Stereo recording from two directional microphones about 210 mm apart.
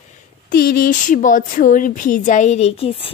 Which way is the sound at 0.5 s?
45° left (ahead or behind).